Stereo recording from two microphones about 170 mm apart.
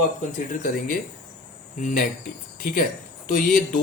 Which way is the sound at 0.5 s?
50° left (ahead or behind).